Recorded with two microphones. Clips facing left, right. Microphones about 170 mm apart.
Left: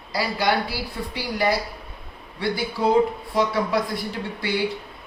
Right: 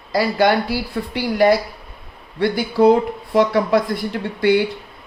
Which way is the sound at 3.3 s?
55° right (ahead or behind).